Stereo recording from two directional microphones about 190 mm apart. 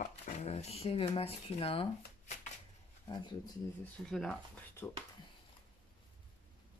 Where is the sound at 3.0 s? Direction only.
25° left (ahead or behind).